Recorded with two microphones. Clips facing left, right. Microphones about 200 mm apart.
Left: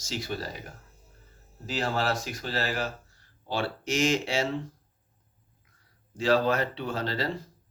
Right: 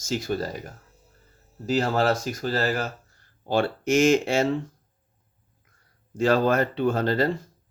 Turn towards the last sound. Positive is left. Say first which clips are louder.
# right 7 dB
turn(degrees=-50)  # may be behind; listen again after turning